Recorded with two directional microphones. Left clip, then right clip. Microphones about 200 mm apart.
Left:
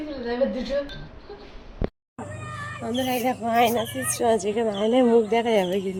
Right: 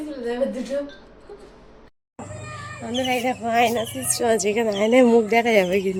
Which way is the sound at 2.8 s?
5° right (ahead or behind).